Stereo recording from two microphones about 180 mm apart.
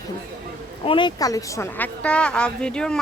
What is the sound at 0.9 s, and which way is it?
Speech, 25° left (ahead or behind).